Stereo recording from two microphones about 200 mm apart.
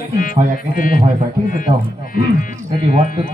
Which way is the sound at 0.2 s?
45° left (ahead or behind).